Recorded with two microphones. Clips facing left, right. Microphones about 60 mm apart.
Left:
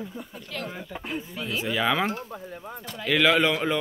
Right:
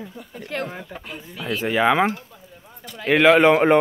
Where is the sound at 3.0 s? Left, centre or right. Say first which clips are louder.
Right 7 dB; right.